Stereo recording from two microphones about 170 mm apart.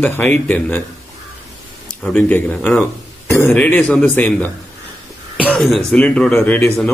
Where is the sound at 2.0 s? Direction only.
5° left (ahead or behind).